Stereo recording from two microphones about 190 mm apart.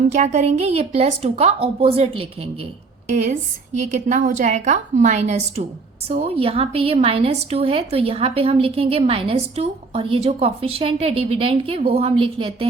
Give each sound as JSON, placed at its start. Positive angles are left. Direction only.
{"t": 0.1, "sound": "a woman's voice", "side_deg": -40}
{"t": 3.8, "sound": "a woman's voice", "side_deg": -40}